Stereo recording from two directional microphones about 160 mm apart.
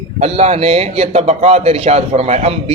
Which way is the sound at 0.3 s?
40° right (ahead or behind).